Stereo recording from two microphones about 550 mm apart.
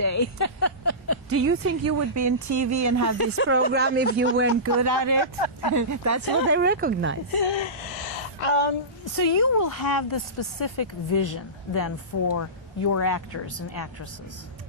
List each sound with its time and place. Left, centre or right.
0.0 s a sound: left
1.3 s speech: right
3.7 s speech: centre
4.8 s speech: right
5.2 s speech: left
5.7 s speech: right
7.3 s speech: left
7.9 s a sound: left
9.4 s speech: left